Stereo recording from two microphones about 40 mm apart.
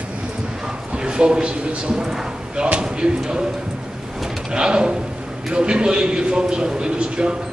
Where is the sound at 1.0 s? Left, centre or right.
Right.